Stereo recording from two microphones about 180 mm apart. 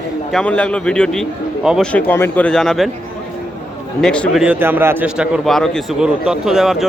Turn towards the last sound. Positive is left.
turn(degrees=0)  # may be behind; listen again after turning